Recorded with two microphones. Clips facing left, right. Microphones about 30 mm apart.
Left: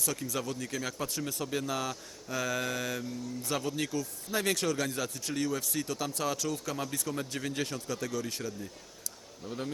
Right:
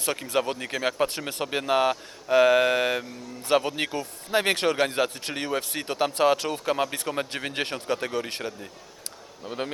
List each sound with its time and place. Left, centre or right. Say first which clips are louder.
0.0 s speech: right 8 dB; right